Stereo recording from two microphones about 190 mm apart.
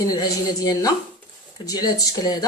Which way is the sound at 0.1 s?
20° left (ahead or behind).